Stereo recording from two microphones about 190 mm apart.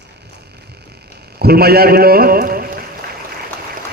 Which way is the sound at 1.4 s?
55° right (ahead or behind).